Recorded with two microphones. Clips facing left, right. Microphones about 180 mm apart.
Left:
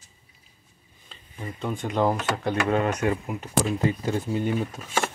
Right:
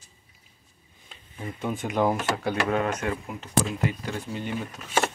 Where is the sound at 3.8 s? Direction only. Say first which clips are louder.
Left 4 dB; 25° left (ahead or behind).